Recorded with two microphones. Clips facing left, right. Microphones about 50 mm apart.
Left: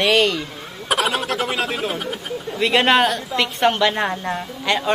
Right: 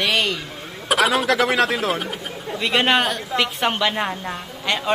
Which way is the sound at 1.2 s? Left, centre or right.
Right.